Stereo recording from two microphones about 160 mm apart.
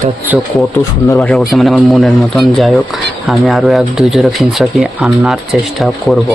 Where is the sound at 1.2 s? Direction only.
Centre (ahead or behind).